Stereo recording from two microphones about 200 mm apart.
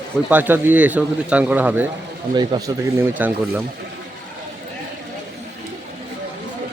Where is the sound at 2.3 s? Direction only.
20° right (ahead or behind).